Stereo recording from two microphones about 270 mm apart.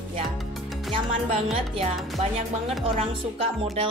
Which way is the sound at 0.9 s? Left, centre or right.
Right.